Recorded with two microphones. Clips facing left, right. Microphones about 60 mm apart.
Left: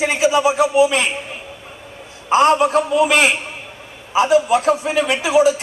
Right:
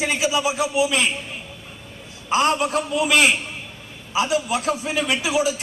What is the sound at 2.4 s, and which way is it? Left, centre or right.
Speech, centre.